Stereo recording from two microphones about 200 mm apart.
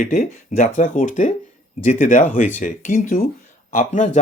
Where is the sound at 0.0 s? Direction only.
40° left (ahead or behind).